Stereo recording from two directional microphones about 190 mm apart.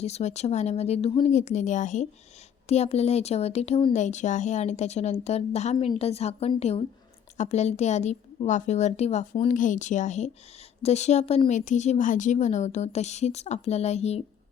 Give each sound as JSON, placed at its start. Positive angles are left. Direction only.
{"t": 0.0, "sound": "a woman's voice", "side_deg": 35}